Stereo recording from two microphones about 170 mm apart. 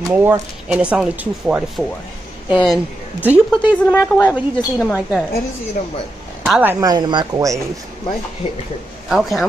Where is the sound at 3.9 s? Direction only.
10° left (ahead or behind).